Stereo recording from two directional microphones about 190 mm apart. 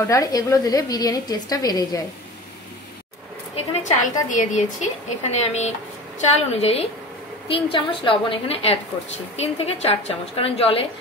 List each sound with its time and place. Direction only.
0.0 s a woman's voice: 15° left (ahead or behind)
3.5 s a woman's voice: 40° left (ahead or behind)